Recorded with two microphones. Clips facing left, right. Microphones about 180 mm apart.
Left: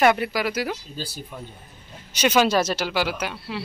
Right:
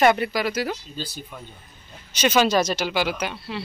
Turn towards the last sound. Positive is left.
turn(degrees=5)  # may be behind; listen again after turning